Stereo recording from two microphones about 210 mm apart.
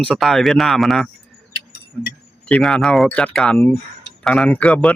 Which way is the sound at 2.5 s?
5° left (ahead or behind).